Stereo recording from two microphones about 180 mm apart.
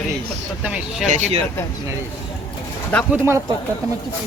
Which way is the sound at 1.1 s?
40° right (ahead or behind).